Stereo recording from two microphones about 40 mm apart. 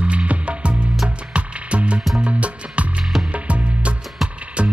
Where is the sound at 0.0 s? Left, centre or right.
Right.